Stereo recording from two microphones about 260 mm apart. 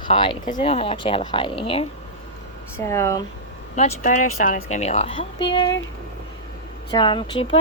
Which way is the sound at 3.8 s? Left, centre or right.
Left.